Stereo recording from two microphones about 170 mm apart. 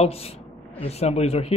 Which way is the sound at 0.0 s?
35° left (ahead or behind).